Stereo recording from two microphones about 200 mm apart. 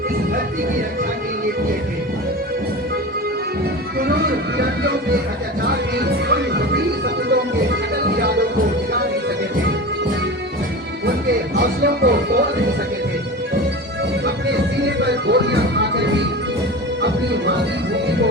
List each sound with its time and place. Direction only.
3.9 s speech: 55° right (ahead or behind)
7.9 s music: 50° right (ahead or behind)
11.0 s music: 55° right (ahead or behind)
14.8 s music: 60° right (ahead or behind)